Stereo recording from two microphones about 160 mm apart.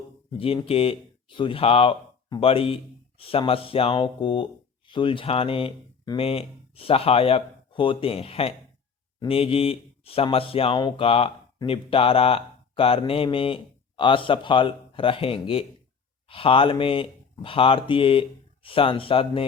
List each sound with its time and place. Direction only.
0.3 s speech: 35° left (ahead or behind)